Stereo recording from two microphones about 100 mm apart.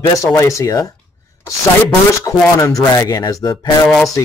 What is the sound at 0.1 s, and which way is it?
Speech, 30° left (ahead or behind).